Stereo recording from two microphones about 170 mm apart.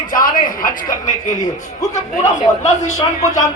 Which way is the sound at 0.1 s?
55° left (ahead or behind).